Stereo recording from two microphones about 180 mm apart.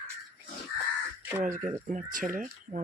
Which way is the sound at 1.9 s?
45° right (ahead or behind).